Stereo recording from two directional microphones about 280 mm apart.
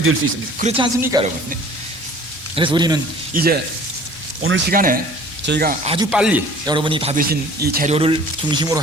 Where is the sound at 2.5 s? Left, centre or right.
Centre.